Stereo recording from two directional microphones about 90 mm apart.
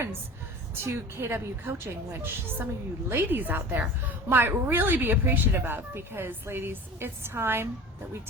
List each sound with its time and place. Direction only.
0.9 s speech: 25° right (ahead or behind)